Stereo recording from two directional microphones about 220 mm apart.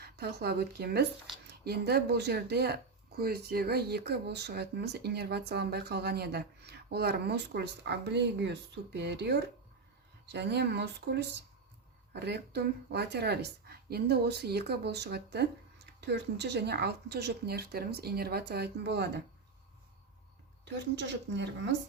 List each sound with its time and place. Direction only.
0.0 s speech: 45° right (ahead or behind)
20.7 s speech: 50° right (ahead or behind)